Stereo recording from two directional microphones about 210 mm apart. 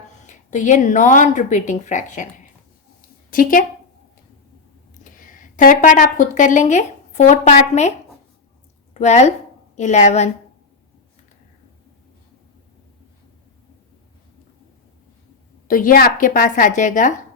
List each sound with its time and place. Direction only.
0.3 s a woman's voice: 35° left (ahead or behind)
3.2 s a woman's voice: 40° left (ahead or behind)
5.0 s a woman's voice: 40° left (ahead or behind)
15.6 s a woman's voice: 40° left (ahead or behind)